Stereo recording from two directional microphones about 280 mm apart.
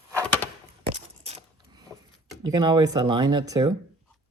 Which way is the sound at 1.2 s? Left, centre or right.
Centre.